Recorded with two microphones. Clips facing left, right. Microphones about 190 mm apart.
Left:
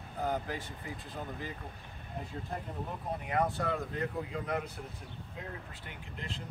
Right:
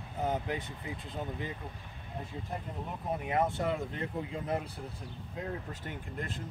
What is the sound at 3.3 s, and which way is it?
Speech, 25° right (ahead or behind).